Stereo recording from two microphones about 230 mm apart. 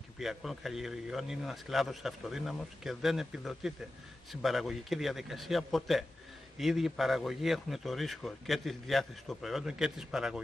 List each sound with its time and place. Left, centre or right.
0.2 s a man's voice: centre